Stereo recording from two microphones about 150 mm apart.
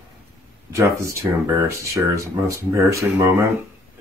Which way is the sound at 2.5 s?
20° right (ahead or behind).